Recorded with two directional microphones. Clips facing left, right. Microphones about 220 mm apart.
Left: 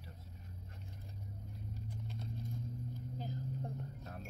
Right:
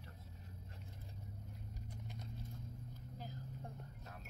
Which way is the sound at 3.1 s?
20° left (ahead or behind).